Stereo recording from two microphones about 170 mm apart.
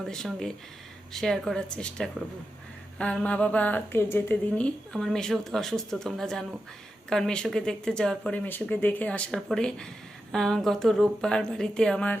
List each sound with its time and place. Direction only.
0.0 s speech: centre (ahead or behind)